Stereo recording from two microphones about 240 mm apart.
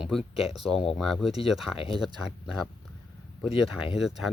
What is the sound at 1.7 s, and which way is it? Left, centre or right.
Speech, left.